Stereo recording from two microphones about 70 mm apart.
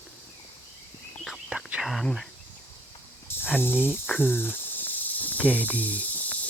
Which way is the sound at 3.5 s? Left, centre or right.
Left.